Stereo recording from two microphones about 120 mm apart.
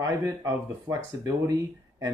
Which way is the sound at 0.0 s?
30° right (ahead or behind).